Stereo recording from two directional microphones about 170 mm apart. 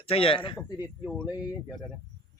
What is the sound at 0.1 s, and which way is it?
Speech, 30° left (ahead or behind).